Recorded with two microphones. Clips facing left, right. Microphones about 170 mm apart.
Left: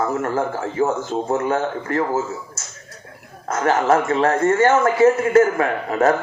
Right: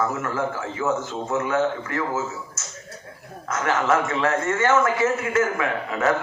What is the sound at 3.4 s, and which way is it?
Speech, 35° left (ahead or behind).